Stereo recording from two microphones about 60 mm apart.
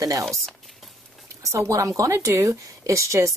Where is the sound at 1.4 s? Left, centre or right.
Right.